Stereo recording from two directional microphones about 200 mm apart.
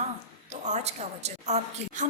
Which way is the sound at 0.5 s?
35° right (ahead or behind).